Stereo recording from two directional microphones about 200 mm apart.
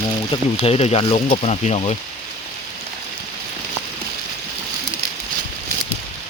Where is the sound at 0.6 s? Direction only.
30° left (ahead or behind).